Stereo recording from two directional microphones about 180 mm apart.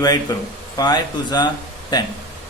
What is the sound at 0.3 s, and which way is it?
Speech, 20° left (ahead or behind).